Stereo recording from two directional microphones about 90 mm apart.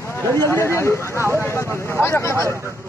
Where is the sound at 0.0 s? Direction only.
25° left (ahead or behind).